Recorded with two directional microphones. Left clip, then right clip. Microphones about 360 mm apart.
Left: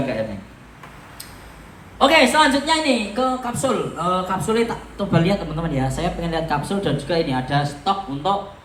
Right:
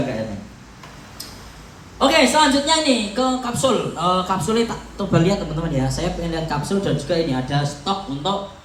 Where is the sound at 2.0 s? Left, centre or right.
Centre.